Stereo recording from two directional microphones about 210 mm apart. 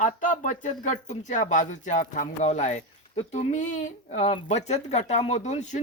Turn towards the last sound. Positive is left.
turn(degrees=35)  # may be behind; listen again after turning